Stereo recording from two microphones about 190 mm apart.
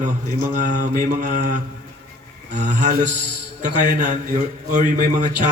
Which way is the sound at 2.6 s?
40° right (ahead or behind).